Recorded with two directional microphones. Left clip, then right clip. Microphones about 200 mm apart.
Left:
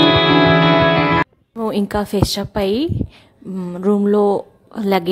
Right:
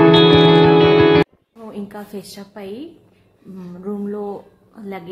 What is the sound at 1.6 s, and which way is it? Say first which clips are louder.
A woman's voice: left 13 dB; 50° left (ahead or behind).